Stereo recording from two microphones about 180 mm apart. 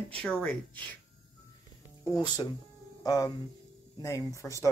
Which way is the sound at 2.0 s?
20° left (ahead or behind).